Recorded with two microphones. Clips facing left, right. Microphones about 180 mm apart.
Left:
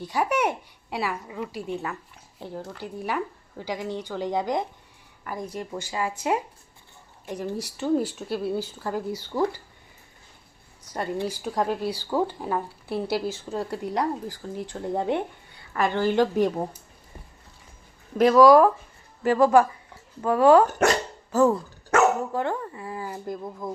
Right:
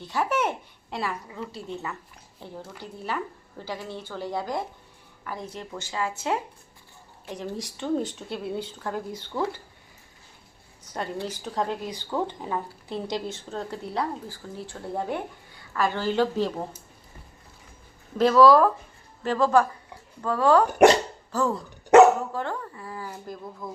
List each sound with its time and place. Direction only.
0.1 s speech: 15° left (ahead or behind)
10.9 s speech: 10° left (ahead or behind)
18.2 s speech: 15° left (ahead or behind)